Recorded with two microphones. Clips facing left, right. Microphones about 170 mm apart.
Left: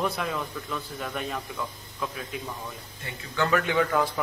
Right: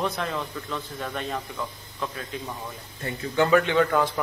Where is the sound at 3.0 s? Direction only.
50° right (ahead or behind).